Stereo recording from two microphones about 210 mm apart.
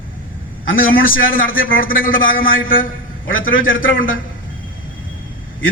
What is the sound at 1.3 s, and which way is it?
A man's voice, 40° left (ahead or behind).